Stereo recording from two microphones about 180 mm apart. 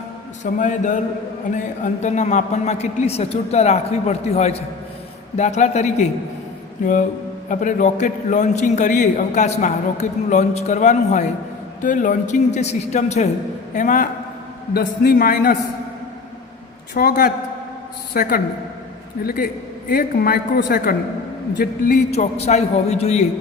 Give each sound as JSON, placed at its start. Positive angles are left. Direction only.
{"t": 0.6, "sound": "a man's voice", "side_deg": 45}
{"t": 7.5, "sound": "a man's voice", "side_deg": 45}
{"t": 16.9, "sound": "a woman's voice", "side_deg": 55}
{"t": 22.1, "sound": "speech", "side_deg": 35}